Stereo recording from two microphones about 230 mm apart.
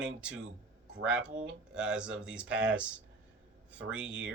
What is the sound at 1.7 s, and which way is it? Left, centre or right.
Speech, centre.